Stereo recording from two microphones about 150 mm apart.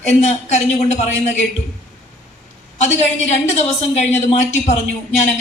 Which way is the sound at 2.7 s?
50° left (ahead or behind).